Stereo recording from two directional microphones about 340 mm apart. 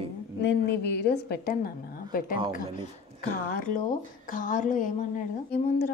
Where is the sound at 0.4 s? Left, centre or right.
Left.